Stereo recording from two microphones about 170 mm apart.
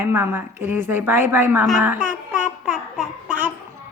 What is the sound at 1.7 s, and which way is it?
Babbling, 10° right (ahead or behind).